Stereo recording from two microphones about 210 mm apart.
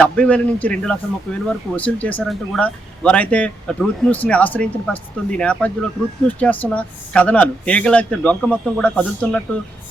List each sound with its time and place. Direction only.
0.0 s a man's voice: 5° left (ahead or behind)